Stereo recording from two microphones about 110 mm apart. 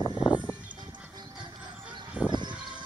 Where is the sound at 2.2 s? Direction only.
15° right (ahead or behind).